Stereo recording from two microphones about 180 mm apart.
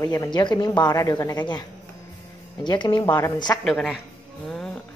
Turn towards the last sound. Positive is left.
turn(degrees=0)  # may be behind; listen again after turning